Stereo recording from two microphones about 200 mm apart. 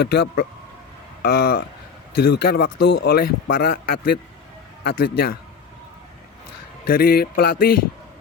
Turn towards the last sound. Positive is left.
turn(degrees=50)  # may be behind; listen again after turning